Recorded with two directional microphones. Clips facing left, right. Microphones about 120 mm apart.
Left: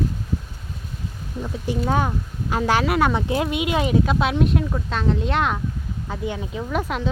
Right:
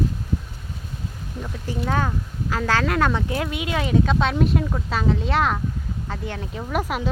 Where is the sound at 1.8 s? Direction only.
15° left (ahead or behind).